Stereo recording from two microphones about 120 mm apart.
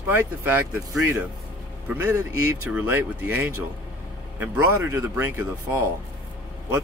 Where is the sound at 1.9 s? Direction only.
20° right (ahead or behind).